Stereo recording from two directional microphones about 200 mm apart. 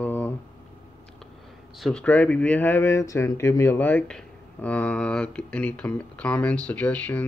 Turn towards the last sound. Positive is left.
turn(degrees=5)  # may be behind; listen again after turning